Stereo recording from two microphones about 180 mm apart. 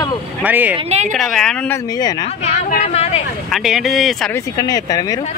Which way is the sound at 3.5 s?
Centre (ahead or behind).